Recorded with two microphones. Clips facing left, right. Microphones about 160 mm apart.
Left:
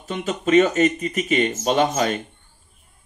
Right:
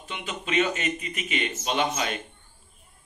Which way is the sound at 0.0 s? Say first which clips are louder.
Left 11 dB; 40° left (ahead or behind).